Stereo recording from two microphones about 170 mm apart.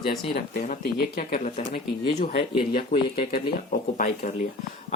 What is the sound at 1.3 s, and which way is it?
Speech, 55° left (ahead or behind).